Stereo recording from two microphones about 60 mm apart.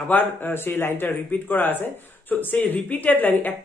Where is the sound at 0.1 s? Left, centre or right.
Left.